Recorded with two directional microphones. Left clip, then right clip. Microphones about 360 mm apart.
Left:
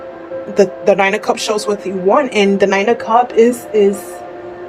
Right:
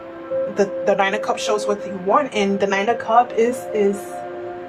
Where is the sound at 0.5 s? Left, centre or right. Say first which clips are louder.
Left 8 dB; left.